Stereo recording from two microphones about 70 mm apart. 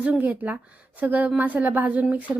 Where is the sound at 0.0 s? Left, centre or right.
Right.